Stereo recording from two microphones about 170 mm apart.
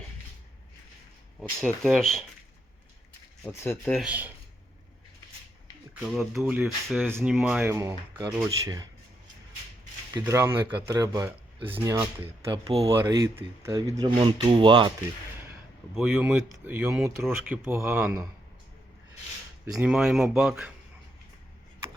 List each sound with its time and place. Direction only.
1.6 s speech: centre (ahead or behind)
3.4 s speech: 15° left (ahead or behind)
3.9 s speech: 5° right (ahead or behind)
5.9 s speech: 5° right (ahead or behind)
7.1 s speech: 15° right (ahead or behind)
10.2 s speech: 15° right (ahead or behind)
12.5 s speech: 35° right (ahead or behind)
12.8 s speech: 20° right (ahead or behind)
14.2 s speech: 30° right (ahead or behind)
16.0 s speech: 10° right (ahead or behind)
19.7 s speech: 5° right (ahead or behind)